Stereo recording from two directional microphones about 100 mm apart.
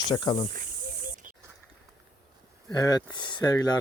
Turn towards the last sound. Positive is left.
turn(degrees=35)  # may be behind; listen again after turning